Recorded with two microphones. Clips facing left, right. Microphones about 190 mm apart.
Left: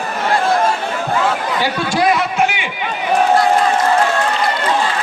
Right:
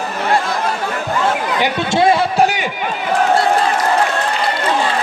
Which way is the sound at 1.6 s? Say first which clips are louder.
Right 3 dB; 25° right (ahead or behind).